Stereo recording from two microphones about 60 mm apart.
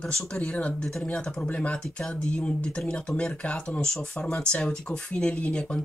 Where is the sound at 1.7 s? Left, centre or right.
Centre.